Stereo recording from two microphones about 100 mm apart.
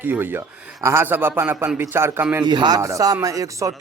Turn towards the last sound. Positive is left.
turn(degrees=-35)  # may be behind; listen again after turning